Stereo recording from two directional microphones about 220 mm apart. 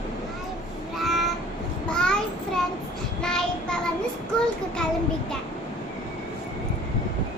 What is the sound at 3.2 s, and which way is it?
Child singing, 5° left (ahead or behind).